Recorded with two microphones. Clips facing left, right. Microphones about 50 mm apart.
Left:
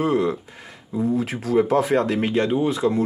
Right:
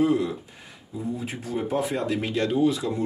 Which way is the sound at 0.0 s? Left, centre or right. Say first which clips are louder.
Left 2 dB; left.